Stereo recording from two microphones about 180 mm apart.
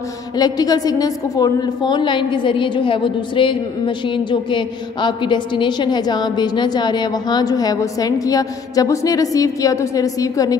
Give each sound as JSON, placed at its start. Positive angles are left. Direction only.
{"t": 0.4, "sound": "a woman's voice", "side_deg": 20}